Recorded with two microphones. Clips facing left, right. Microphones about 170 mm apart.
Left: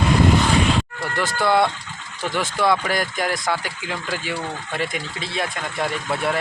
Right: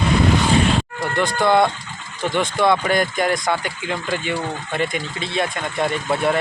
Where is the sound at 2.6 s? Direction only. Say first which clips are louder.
Right 2 dB; centre (ahead or behind).